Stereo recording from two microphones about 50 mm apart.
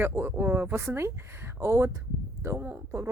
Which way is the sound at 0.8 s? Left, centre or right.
Right.